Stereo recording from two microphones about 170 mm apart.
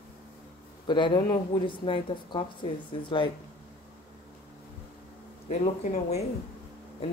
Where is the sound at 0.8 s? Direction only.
25° left (ahead or behind).